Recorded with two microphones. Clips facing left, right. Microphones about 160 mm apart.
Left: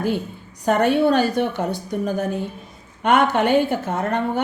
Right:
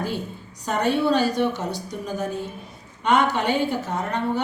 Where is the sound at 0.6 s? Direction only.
55° left (ahead or behind).